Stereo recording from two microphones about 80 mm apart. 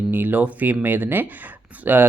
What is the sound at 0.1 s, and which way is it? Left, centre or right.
Speech, right.